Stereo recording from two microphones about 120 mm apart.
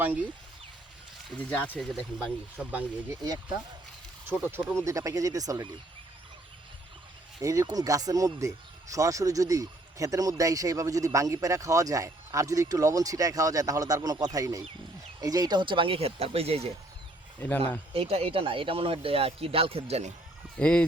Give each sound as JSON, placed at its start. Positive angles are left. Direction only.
{"t": 0.0, "sound": "speech", "side_deg": -15}
{"t": 1.5, "sound": "speech", "side_deg": 15}
{"t": 1.8, "sound": "speech", "side_deg": 0}
{"t": 2.6, "sound": "speech", "side_deg": -10}
{"t": 4.3, "sound": "speech", "side_deg": -15}
{"t": 7.4, "sound": "speech", "side_deg": -25}
{"t": 17.9, "sound": "speech", "side_deg": -55}
{"t": 20.6, "sound": "speech", "side_deg": 10}